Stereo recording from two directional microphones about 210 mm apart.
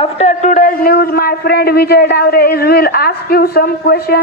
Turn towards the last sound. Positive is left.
turn(degrees=45)  # may be behind; listen again after turning